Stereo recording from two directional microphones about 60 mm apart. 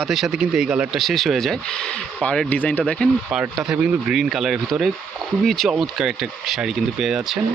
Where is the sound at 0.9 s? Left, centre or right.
Centre.